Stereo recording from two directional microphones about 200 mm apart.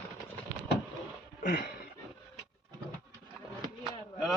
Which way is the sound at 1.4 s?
45° left (ahead or behind).